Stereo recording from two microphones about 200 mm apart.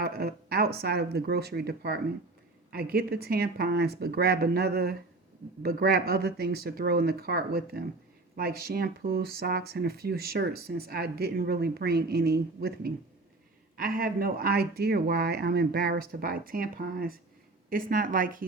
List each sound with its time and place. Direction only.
0.0 s speech: 50° right (ahead or behind)